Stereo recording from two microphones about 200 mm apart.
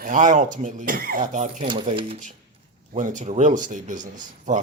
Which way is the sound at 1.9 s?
25° right (ahead or behind).